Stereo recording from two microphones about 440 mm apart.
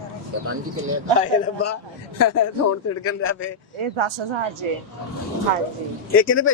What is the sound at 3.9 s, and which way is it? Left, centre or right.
Speech, right.